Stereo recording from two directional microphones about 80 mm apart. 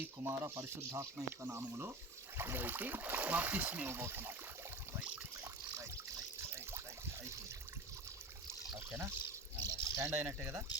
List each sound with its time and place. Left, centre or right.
0.3 s speech: right
8.9 s speech: right
9.6 s a sound: right
10.2 s speech: right